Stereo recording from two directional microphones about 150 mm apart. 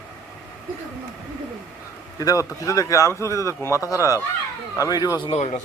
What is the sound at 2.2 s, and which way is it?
A man's voice, 25° left (ahead or behind).